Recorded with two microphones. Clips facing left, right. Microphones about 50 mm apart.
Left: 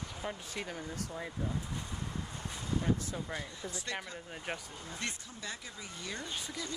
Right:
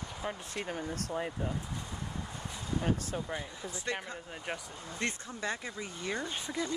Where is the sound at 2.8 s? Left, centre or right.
Right.